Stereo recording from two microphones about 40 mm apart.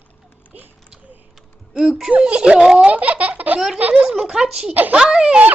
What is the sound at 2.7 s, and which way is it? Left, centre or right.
Speech, right.